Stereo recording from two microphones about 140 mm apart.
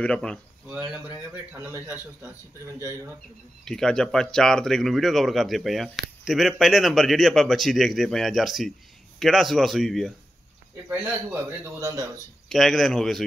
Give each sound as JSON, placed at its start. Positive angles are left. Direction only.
{"t": 0.0, "sound": "speech", "side_deg": 5}
{"t": 0.7, "sound": "a man's voice", "side_deg": -5}
{"t": 3.6, "sound": "speech", "side_deg": 5}
{"t": 10.9, "sound": "a man's voice", "side_deg": -15}
{"t": 12.4, "sound": "speech", "side_deg": 0}